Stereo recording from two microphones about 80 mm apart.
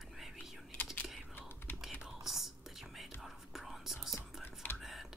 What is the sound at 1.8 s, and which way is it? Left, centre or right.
Whispering, centre.